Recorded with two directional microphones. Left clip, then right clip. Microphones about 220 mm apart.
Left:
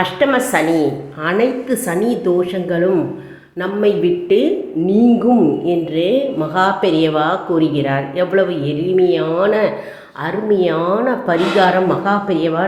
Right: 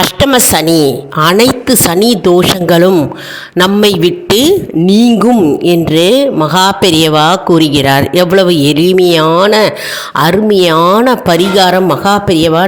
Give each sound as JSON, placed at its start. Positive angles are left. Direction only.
{"t": 0.2, "sound": "a woman's voice", "side_deg": -50}